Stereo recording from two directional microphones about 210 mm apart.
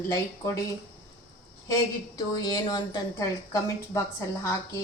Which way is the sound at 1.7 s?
20° left (ahead or behind).